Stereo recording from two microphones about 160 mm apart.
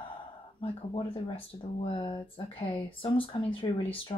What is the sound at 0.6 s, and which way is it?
Speech, 35° left (ahead or behind).